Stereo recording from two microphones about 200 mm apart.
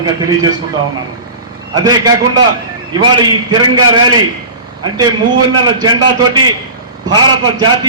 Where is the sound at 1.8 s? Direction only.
20° right (ahead or behind).